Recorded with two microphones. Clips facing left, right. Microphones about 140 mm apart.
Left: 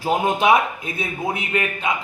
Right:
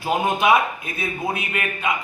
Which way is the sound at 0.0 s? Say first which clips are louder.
Left 1 dB; 25° left (ahead or behind).